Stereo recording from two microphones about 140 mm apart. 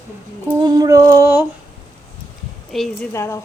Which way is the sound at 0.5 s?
25° right (ahead or behind).